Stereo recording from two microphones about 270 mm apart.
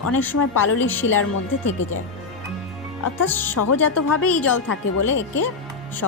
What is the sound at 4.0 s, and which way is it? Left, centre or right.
Speech, left.